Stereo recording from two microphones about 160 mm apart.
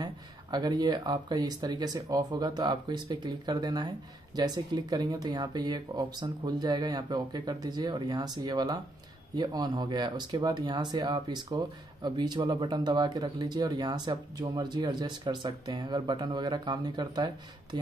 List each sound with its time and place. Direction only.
0.0 s speech: 25° right (ahead or behind)